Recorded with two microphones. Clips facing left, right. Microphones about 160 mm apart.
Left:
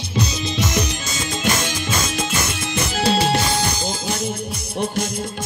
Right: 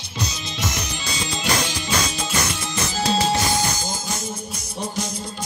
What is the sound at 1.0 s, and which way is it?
Music, 50° left (ahead or behind).